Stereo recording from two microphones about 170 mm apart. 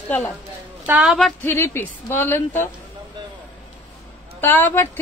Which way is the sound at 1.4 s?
15° left (ahead or behind).